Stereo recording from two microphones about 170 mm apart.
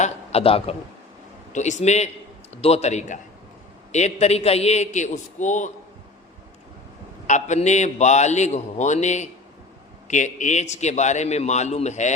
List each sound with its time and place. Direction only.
0.0 s a man's voice: 35° left (ahead or behind)
7.3 s a man's voice: 45° left (ahead or behind)